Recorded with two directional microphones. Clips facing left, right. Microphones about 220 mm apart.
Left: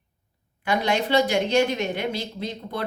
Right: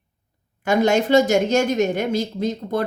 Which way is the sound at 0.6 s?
45° right (ahead or behind).